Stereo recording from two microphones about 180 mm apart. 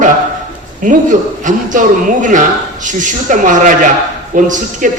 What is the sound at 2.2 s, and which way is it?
A man's voice, 45° right (ahead or behind).